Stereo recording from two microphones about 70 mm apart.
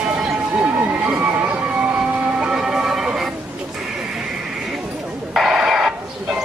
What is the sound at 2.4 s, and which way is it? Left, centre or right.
Music, centre.